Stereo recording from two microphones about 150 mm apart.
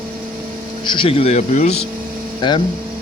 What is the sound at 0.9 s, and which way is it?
Speech, 35° left (ahead or behind).